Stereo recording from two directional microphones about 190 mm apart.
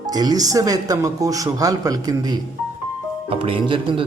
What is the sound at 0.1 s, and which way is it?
Speech, 20° right (ahead or behind).